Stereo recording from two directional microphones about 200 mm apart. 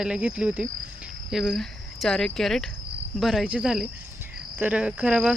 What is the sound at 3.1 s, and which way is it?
Speech, centre (ahead or behind).